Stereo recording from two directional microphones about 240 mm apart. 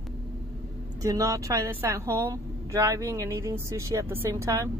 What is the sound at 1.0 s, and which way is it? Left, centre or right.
A woman's voice, centre.